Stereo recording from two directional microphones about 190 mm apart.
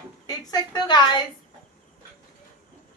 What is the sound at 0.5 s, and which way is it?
Speech, 25° left (ahead or behind).